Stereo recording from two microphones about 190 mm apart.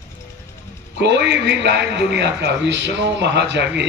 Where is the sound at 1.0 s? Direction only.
65° right (ahead or behind).